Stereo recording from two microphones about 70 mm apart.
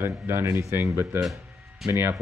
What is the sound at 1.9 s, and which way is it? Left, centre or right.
Speech, right.